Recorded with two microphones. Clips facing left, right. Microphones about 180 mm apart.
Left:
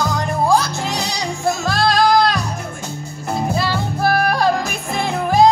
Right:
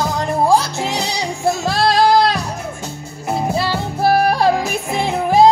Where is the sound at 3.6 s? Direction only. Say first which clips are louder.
Right 1 dB; 30° right (ahead or behind).